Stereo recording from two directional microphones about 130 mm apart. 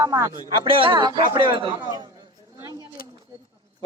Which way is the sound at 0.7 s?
40° right (ahead or behind).